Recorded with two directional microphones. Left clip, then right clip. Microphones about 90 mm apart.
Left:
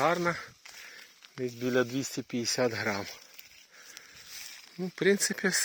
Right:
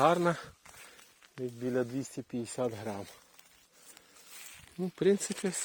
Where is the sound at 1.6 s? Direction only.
50° left (ahead or behind).